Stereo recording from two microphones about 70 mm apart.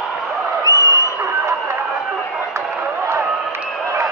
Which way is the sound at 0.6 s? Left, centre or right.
Left.